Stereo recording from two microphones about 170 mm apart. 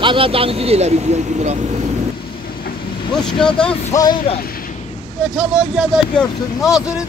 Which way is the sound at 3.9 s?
20° left (ahead or behind).